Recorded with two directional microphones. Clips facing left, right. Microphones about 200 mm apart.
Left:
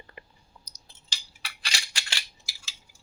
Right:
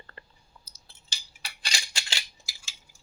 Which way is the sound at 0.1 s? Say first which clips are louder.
Left 2 dB; 15° left (ahead or behind).